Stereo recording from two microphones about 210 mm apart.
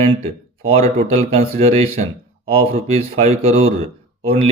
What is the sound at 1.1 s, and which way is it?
Speech, 30° right (ahead or behind).